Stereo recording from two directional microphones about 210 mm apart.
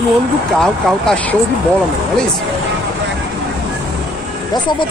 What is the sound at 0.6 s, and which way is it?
Speech, 5° left (ahead or behind).